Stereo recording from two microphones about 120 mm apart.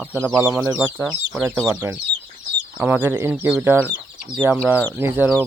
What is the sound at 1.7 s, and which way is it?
Speech, 15° right (ahead or behind).